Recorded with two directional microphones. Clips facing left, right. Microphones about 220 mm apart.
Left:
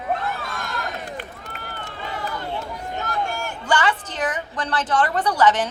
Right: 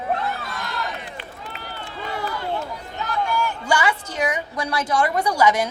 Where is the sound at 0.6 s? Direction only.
45° left (ahead or behind).